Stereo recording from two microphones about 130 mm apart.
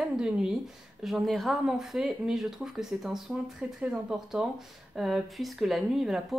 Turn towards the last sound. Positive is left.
turn(degrees=0)  # may be behind; listen again after turning